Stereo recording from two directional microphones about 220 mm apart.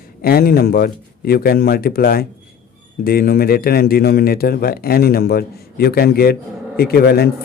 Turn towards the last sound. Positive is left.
turn(degrees=45)  # may be behind; listen again after turning